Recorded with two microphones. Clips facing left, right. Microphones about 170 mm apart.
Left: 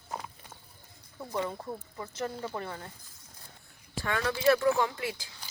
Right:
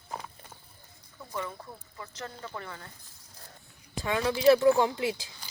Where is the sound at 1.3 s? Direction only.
20° left (ahead or behind).